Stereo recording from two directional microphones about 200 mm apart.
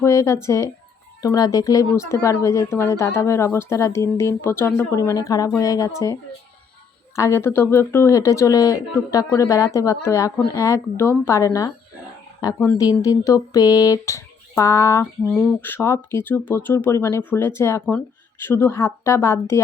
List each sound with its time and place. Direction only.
0.0 s speech: 15° left (ahead or behind)
7.2 s speech: 15° left (ahead or behind)